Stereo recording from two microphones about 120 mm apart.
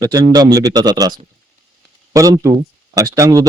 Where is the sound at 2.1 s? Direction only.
25° right (ahead or behind).